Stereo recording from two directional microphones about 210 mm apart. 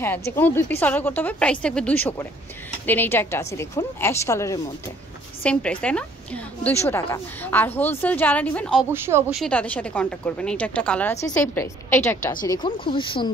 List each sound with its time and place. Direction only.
0.0 s a woman's voice: 10° left (ahead or behind)
8.8 s speech: 10° right (ahead or behind)
9.4 s a woman's voice: 5° left (ahead or behind)
12.4 s speech: 20° left (ahead or behind)